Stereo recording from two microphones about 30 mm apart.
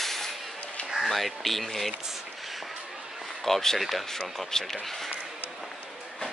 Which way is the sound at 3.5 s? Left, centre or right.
Centre.